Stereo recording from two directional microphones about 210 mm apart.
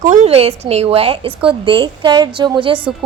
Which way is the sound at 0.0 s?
35° right (ahead or behind).